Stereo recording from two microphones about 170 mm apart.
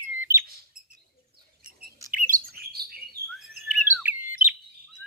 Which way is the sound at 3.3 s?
Centre (ahead or behind).